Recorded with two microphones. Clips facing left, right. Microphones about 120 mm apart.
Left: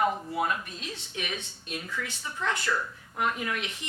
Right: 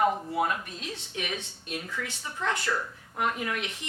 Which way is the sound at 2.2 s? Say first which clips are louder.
Even; 45° right (ahead or behind).